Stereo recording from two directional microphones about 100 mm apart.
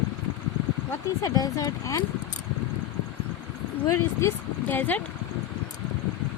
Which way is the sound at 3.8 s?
25° left (ahead or behind).